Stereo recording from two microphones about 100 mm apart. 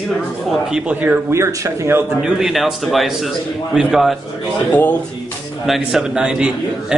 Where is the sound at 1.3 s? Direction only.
25° right (ahead or behind).